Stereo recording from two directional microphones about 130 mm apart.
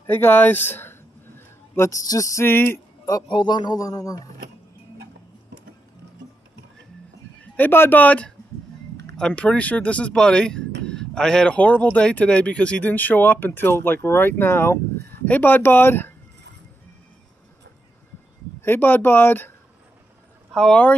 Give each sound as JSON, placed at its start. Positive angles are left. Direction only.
{"t": 0.0, "sound": "speech", "side_deg": 15}
{"t": 3.1, "sound": "a man's voice", "side_deg": 30}
{"t": 7.5, "sound": "speech", "side_deg": 15}
{"t": 18.6, "sound": "speech", "side_deg": 15}
{"t": 20.5, "sound": "speech", "side_deg": 5}